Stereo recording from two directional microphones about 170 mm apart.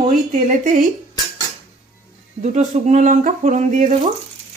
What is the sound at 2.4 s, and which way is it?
Speech, 45° right (ahead or behind).